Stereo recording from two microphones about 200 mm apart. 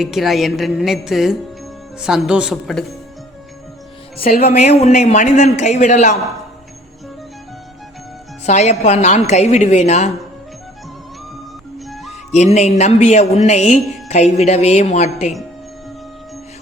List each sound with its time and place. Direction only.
0.0 s a woman's voice: centre (ahead or behind)
4.3 s speech: 45° left (ahead or behind)
8.4 s speech: 35° left (ahead or behind)
12.3 s speech: 35° left (ahead or behind)